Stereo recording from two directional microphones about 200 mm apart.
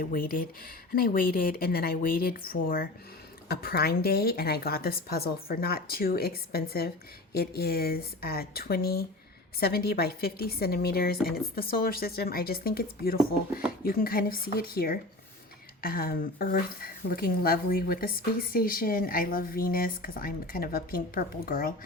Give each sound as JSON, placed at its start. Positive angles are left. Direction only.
{"t": 0.0, "sound": "speech", "side_deg": 45}